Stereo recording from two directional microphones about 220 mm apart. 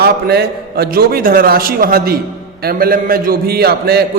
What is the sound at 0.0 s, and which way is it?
A man's voice, 45° right (ahead or behind).